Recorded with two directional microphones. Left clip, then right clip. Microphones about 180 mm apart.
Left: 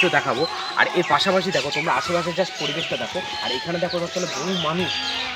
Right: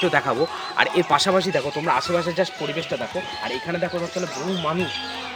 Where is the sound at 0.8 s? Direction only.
25° right (ahead or behind).